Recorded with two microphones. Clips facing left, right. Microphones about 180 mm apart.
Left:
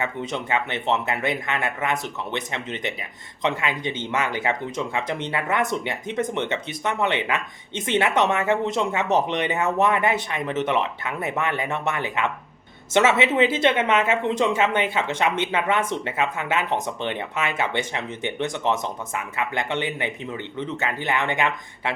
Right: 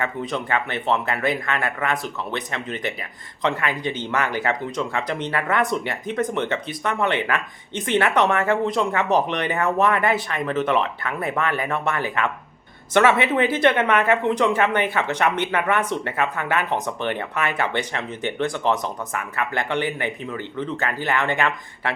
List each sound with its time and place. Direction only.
0.0 s speech: 20° left (ahead or behind)